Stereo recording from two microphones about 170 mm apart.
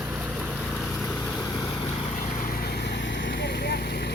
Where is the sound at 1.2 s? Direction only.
20° left (ahead or behind).